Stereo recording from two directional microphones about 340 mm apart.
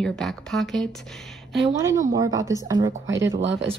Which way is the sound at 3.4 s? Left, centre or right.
Right.